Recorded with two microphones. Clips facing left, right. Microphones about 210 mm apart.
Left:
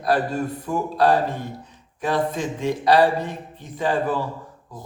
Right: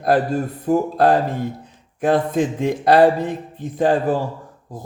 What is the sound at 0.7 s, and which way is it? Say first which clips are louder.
Speech: right 4 dB; 50° right (ahead or behind).